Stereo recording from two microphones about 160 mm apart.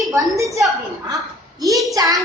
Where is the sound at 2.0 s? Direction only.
25° right (ahead or behind).